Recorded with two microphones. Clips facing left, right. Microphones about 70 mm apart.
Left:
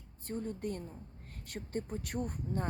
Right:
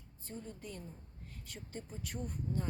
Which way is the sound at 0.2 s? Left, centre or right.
Left.